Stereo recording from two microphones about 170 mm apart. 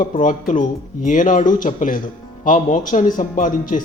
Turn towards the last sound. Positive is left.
turn(degrees=50)  # may be behind; listen again after turning